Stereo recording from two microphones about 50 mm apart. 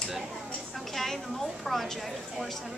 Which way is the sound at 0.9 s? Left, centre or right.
Centre.